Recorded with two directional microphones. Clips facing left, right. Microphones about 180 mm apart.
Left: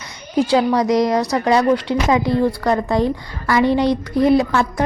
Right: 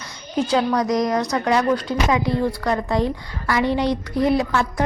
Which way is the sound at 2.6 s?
40° left (ahead or behind).